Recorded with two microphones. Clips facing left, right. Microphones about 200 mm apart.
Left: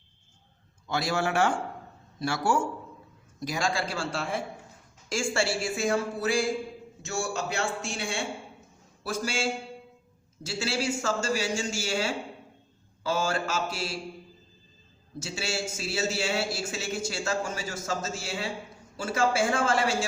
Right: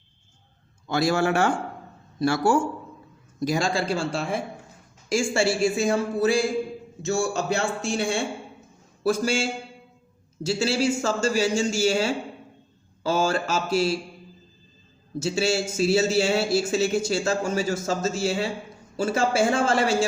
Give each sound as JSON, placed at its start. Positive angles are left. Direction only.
{"t": 0.9, "sound": "a man's voice", "side_deg": -45}
{"t": 15.2, "sound": "a man's voice", "side_deg": -30}